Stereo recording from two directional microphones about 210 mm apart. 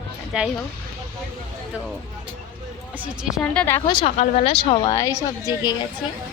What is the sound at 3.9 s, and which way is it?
Speech, 30° left (ahead or behind).